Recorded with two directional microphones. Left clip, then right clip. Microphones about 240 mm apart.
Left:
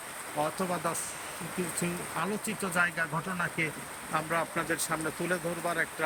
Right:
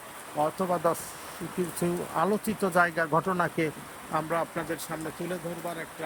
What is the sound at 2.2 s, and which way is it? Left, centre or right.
Speech, centre.